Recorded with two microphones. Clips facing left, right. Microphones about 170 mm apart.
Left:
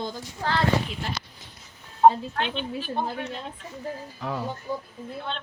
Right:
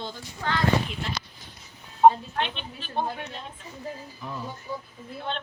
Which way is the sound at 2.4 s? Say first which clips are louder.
Left 3 dB; centre (ahead or behind).